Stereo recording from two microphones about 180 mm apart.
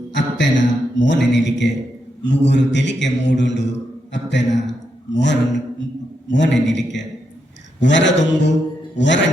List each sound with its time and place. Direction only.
0.1 s a sound: 80° left
2.2 s a man's voice: 80° left
7.8 s a man's voice: 80° left